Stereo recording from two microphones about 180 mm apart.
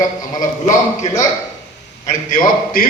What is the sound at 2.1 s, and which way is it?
Speech, 50° left (ahead or behind).